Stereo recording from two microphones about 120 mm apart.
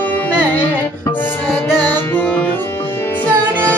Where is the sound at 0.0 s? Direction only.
15° left (ahead or behind).